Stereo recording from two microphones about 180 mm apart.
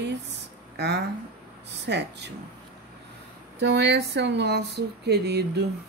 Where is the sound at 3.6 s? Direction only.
70° right (ahead or behind).